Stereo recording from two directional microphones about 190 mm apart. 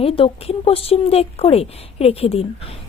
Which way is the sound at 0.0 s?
30° left (ahead or behind).